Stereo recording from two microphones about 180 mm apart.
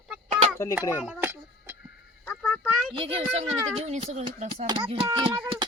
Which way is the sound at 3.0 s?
30° right (ahead or behind).